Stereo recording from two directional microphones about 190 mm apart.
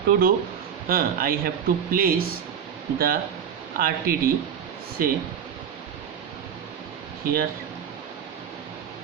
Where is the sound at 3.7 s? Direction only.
50° right (ahead or behind).